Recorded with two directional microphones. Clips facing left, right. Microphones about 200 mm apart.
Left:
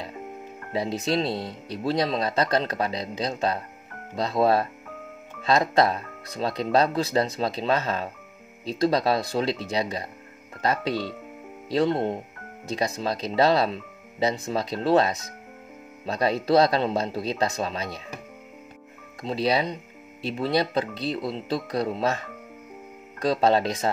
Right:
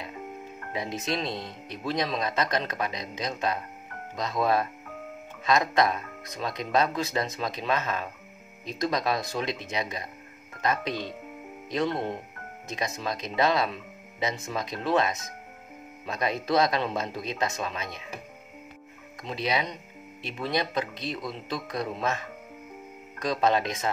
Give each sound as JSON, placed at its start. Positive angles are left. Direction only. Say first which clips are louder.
{"t": 0.7, "sound": "speech", "louder": "left 6 dB", "side_deg": 30}
{"t": 19.2, "sound": "speech", "louder": "left 5 dB", "side_deg": 35}